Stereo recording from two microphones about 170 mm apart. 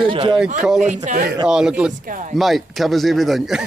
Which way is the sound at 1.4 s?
5° right (ahead or behind).